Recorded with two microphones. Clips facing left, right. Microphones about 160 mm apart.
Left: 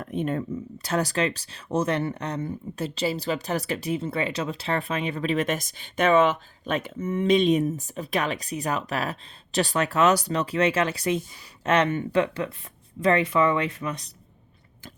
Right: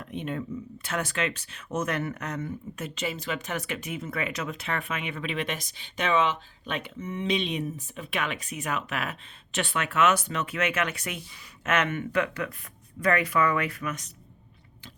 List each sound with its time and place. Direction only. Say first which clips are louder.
0.0 s speech: left 5 dB; 45° left (ahead or behind); by 14.1 s 30° left (ahead or behind)